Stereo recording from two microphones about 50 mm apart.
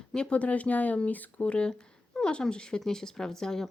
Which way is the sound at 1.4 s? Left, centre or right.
Left.